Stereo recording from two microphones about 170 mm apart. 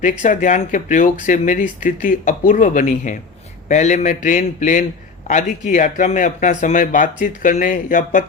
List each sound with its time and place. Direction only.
0.0 s speech: 50° left (ahead or behind)